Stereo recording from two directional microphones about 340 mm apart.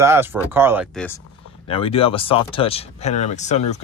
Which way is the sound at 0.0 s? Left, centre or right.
Centre.